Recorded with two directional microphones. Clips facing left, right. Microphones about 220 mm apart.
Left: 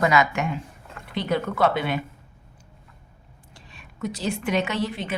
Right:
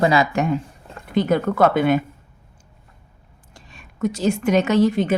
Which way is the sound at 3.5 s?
45° right (ahead or behind).